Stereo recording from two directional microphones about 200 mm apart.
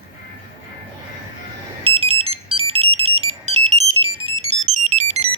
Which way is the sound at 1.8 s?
30° right (ahead or behind).